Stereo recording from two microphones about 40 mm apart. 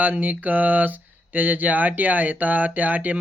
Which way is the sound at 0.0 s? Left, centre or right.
Right.